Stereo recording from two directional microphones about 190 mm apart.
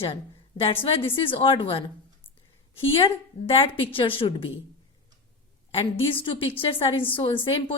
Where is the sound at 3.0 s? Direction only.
30° left (ahead or behind).